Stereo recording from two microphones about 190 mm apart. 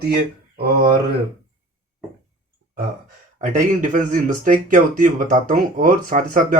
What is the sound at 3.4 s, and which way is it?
Speech, 40° right (ahead or behind).